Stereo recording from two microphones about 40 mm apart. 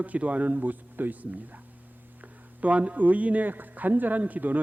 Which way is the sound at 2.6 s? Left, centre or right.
Right.